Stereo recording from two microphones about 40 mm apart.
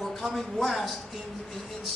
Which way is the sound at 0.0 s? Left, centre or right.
Centre.